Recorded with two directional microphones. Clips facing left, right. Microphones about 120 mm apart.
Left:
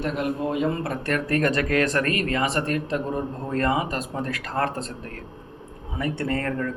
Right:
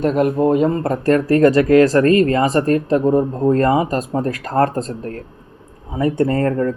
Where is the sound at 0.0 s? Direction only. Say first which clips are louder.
Right 10 dB; 45° right (ahead or behind).